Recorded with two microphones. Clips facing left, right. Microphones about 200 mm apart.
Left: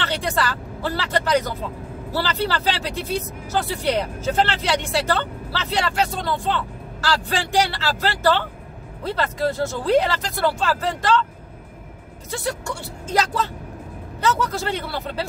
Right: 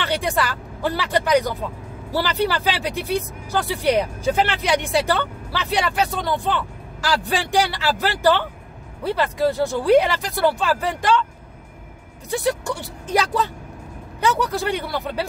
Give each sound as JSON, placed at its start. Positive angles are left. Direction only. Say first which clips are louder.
{"t": 0.0, "sound": "speech", "louder": "right 1 dB", "side_deg": -15}
{"t": 12.3, "sound": "speech", "louder": "right 5 dB", "side_deg": -15}